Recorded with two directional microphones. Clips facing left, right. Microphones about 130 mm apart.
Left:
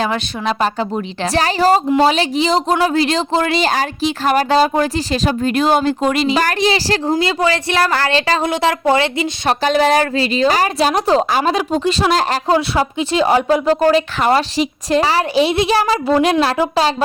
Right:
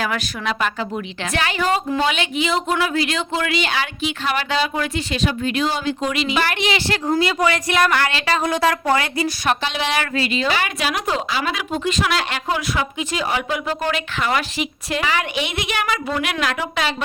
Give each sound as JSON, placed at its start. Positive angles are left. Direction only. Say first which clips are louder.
{"t": 0.0, "sound": "a woman's voice", "louder": "left 5 dB", "side_deg": 30}
{"t": 9.5, "sound": "a woman's voice", "louder": "left 11 dB", "side_deg": 40}